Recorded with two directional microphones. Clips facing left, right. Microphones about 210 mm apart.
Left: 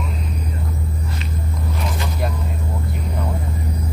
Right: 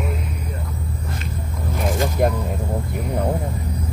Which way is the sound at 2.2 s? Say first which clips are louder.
Right 8 dB; 50° right (ahead or behind).